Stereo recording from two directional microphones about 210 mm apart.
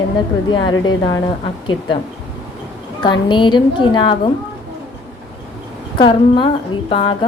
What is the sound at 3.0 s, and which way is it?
A woman's voice, 20° left (ahead or behind).